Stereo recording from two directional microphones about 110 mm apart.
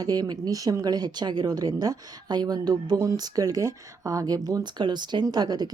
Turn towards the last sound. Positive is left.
turn(degrees=-40)  # may be behind; listen again after turning